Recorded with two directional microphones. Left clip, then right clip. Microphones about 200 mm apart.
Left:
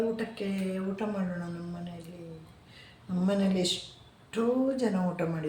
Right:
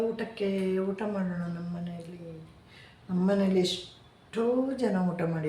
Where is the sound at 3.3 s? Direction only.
15° right (ahead or behind).